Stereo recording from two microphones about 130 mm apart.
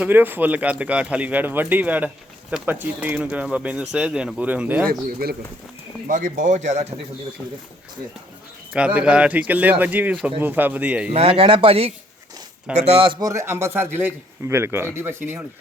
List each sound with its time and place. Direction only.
0.0 s a man's voice: 15° right (ahead or behind)
6.1 s speech: 90° right; by 6.8 s 65° right (ahead or behind)
8.7 s a man's voice: 10° right (ahead or behind)
11.1 s speech: 50° right (ahead or behind)
13.1 s a man's voice: 25° right (ahead or behind)